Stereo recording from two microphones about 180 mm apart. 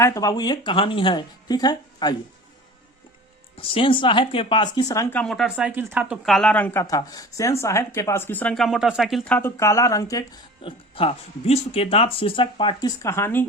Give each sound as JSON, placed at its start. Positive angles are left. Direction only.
{"t": 0.0, "sound": "speech", "side_deg": 20}
{"t": 3.6, "sound": "speech", "side_deg": 30}
{"t": 5.2, "sound": "speech", "side_deg": 0}
{"t": 6.8, "sound": "speech", "side_deg": 20}
{"t": 13.0, "sound": "speech", "side_deg": 15}